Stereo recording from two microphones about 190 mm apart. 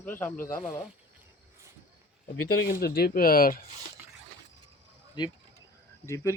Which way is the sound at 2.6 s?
60° left (ahead or behind).